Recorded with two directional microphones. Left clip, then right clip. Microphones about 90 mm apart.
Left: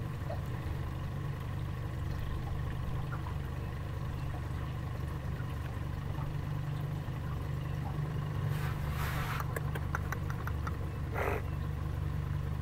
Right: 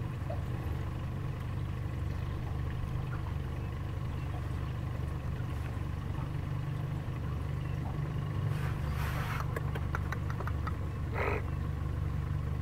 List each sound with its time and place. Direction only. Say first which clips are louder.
8.5 s vehicle: even; 35° left (ahead or behind)
11.1 s vehicle: right 1 dB; 40° left (ahead or behind)